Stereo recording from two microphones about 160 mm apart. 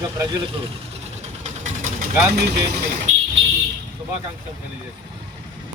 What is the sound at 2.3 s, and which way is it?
Speech, 85° right.